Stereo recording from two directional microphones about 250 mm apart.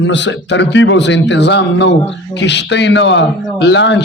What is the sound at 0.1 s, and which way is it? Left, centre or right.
A man's voice, left.